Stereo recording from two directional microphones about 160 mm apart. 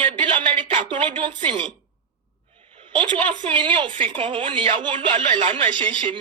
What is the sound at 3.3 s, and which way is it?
Speech, 30° right (ahead or behind).